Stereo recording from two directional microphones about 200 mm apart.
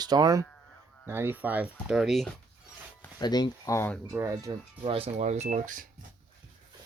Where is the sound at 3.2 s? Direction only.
20° left (ahead or behind).